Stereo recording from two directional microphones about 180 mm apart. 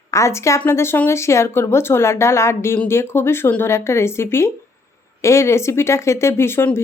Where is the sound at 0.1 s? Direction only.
15° left (ahead or behind).